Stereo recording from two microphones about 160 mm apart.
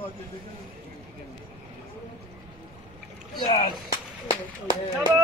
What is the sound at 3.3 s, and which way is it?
Speech, 30° left (ahead or behind).